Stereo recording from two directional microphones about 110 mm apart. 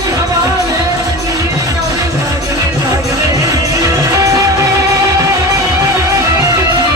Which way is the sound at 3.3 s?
30° right (ahead or behind).